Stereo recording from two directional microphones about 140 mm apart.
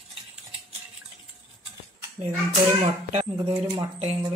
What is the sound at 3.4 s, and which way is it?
Speech, 35° right (ahead or behind).